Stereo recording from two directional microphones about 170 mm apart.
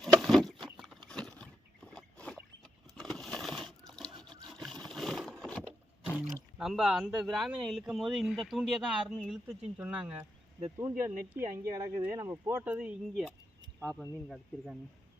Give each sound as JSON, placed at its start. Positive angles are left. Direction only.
{"t": 0.2, "sound": "patter", "side_deg": 0}
{"t": 1.0, "sound": "a sound", "side_deg": 5}
{"t": 4.2, "sound": "vehicle", "side_deg": 0}
{"t": 6.6, "sound": "speech", "side_deg": 0}
{"t": 9.7, "sound": "speech", "side_deg": -10}
{"t": 13.8, "sound": "speech", "side_deg": 10}